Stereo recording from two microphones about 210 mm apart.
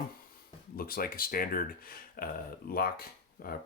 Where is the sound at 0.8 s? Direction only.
45° left (ahead or behind).